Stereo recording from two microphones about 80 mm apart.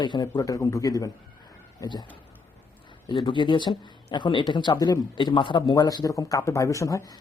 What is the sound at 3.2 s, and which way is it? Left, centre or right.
Speech, left.